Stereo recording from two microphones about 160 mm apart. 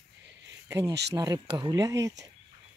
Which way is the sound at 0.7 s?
20° right (ahead or behind).